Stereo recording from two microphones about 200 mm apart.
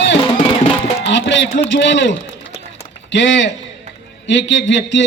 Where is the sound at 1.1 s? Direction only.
60° left (ahead or behind).